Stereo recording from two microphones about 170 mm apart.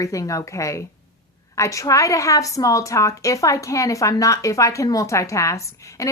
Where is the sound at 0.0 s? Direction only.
20° left (ahead or behind).